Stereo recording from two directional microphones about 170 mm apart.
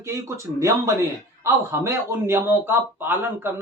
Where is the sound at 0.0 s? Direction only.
15° right (ahead or behind).